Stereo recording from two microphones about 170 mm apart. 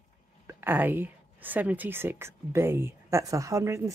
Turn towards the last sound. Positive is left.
turn(degrees=-15)  # may be behind; listen again after turning